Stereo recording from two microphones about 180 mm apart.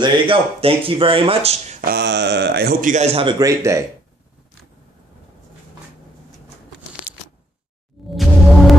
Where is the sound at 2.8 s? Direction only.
40° right (ahead or behind); by 3.8 s 15° right (ahead or behind).